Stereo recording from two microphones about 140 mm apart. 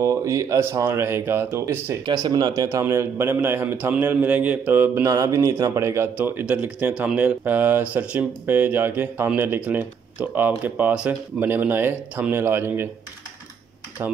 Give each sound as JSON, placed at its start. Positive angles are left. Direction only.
{"t": 0.0, "sound": "speech", "side_deg": -20}
{"t": 2.2, "sound": "speech", "side_deg": -30}
{"t": 14.0, "sound": "speech", "side_deg": -15}